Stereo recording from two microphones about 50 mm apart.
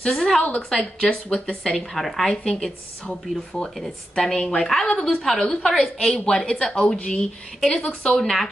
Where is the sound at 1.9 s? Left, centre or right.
Centre.